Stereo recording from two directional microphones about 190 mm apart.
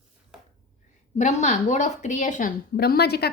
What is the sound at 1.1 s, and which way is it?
Speech, 35° left (ahead or behind).